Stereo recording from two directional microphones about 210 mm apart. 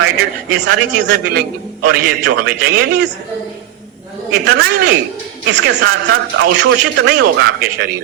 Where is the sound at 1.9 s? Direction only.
45° right (ahead or behind).